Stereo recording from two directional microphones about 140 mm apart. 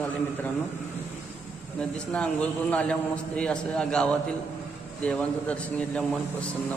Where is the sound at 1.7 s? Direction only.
10° left (ahead or behind).